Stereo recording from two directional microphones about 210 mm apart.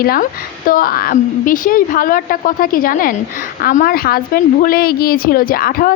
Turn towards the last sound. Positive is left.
turn(degrees=45)  # may be behind; listen again after turning